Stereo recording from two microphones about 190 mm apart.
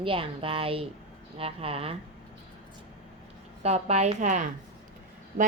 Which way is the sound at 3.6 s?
35° right (ahead or behind).